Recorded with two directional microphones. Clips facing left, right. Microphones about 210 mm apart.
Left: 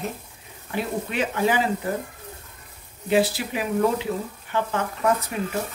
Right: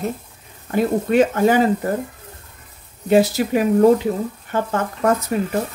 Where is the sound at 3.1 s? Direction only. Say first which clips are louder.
Right 6 dB; 45° right (ahead or behind).